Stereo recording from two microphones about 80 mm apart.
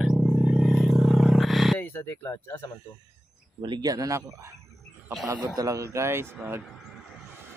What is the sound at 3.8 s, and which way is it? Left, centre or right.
Speech, right.